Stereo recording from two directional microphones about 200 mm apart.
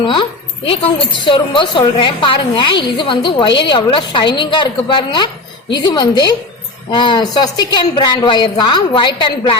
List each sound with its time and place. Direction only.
0.0 s a woman's voice: 25° left (ahead or behind)